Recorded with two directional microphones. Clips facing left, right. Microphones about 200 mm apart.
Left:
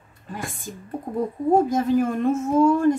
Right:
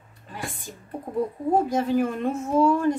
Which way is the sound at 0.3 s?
45° left (ahead or behind).